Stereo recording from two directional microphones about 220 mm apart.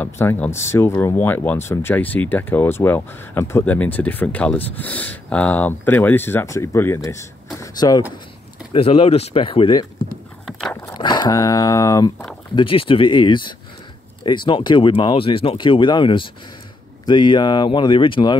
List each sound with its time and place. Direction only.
0.0 s speech: 10° left (ahead or behind)
10.4 s a sound: centre (ahead or behind)
10.9 s speech: 20° left (ahead or behind)